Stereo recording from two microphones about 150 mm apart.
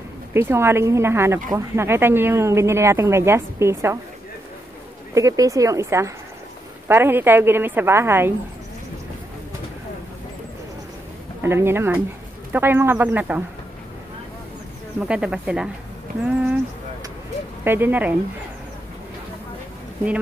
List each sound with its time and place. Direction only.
0.3 s speech: 15° right (ahead or behind)
5.1 s speech: 20° right (ahead or behind)
11.4 s speech: 15° right (ahead or behind)
15.0 s speech: 5° right (ahead or behind)
17.6 s speech: 15° right (ahead or behind)